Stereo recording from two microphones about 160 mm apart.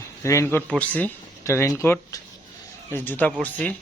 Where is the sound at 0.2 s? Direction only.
20° left (ahead or behind).